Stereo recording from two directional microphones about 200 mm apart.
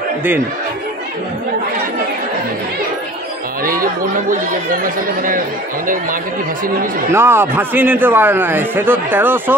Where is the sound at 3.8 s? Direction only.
45° right (ahead or behind).